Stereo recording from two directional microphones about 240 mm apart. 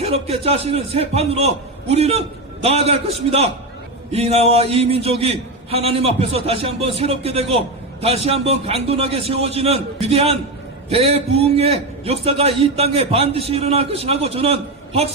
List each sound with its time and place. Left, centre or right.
0.0 s a man's voice: right